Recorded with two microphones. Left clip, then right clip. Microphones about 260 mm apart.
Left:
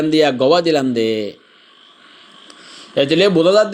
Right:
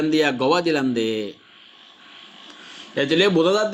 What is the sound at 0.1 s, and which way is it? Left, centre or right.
A man's voice, centre.